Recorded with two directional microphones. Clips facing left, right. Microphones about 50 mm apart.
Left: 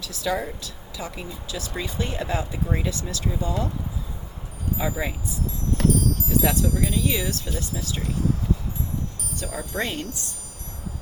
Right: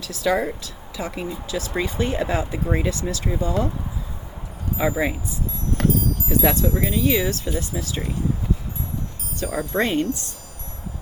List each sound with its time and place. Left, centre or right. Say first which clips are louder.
0.2 s speech: right 5 dB; right
4.8 s speech: right 7 dB; right
6.2 s speech: right 6 dB; right
9.4 s speech: right 6 dB; right